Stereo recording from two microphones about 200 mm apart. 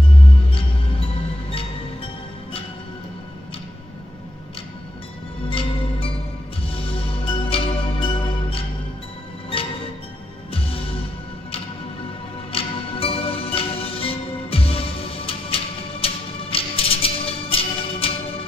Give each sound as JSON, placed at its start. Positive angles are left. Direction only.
{"t": 0.5, "sound": "music", "side_deg": 25}
{"t": 5.5, "sound": "music", "side_deg": 25}
{"t": 10.5, "sound": "music", "side_deg": 30}
{"t": 12.5, "sound": "music", "side_deg": 30}